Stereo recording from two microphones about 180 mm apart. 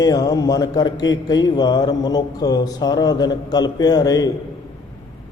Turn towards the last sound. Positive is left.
turn(degrees=20)  # may be behind; listen again after turning